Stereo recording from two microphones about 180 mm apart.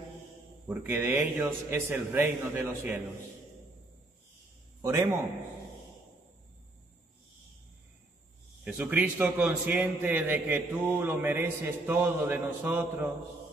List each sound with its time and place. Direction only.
0.7 s a man's voice: 10° right (ahead or behind)
4.8 s a man's voice: 15° right (ahead or behind)
8.6 s a man's voice: 10° right (ahead or behind)